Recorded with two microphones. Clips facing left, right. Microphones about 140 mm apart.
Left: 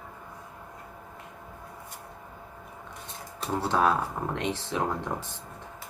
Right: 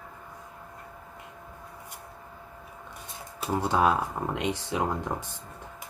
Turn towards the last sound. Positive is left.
turn(degrees=-10)  # may be behind; listen again after turning